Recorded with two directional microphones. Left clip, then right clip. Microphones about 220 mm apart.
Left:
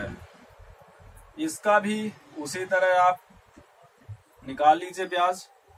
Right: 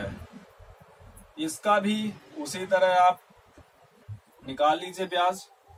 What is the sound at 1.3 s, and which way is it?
A man's voice, 15° right (ahead or behind).